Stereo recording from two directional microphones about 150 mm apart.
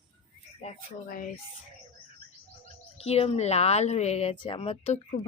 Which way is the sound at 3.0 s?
40° left (ahead or behind).